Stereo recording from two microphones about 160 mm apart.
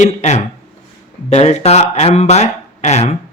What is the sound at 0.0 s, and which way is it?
Speech, 45° left (ahead or behind).